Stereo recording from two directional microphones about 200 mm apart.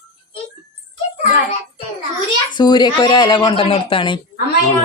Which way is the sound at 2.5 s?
20° left (ahead or behind).